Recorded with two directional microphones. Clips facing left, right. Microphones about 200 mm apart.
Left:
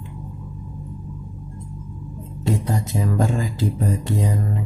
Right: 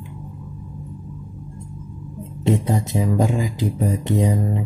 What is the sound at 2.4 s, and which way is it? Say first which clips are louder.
Speech: right 4 dB; 20° right (ahead or behind).